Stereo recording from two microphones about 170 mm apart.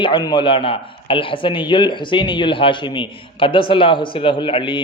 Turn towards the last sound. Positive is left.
turn(degrees=30)  # may be behind; listen again after turning